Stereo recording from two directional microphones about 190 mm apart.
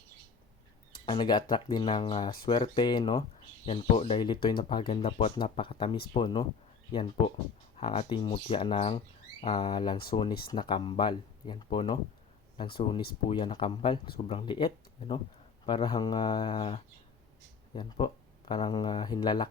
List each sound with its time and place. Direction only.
0.9 s speech: 25° left (ahead or behind)
7.8 s speech: 25° left (ahead or behind)